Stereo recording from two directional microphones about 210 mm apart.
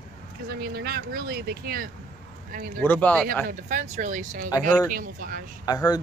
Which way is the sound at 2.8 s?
10° left (ahead or behind).